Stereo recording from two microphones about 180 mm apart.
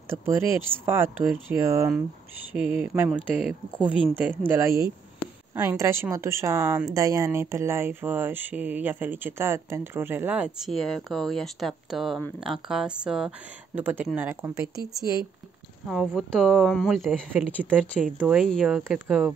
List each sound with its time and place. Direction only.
0.1 s speech: 15° right (ahead or behind)
15.9 s speech: centre (ahead or behind)